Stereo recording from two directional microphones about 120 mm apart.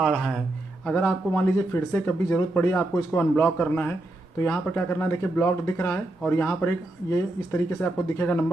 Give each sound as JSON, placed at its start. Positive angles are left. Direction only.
{"t": 0.0, "sound": "a man's voice", "side_deg": 0}
{"t": 0.8, "sound": "speech", "side_deg": 15}